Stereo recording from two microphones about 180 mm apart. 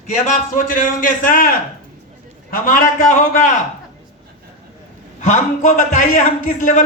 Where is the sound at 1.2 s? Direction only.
50° left (ahead or behind).